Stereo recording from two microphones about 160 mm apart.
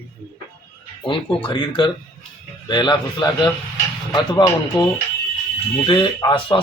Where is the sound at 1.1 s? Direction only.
30° left (ahead or behind).